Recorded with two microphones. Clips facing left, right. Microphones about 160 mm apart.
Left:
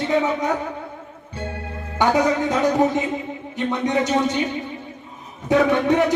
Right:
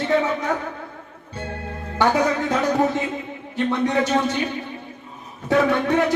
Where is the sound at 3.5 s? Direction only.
15° left (ahead or behind).